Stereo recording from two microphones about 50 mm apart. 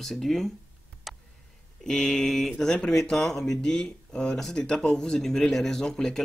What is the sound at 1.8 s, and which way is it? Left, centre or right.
Speech, centre.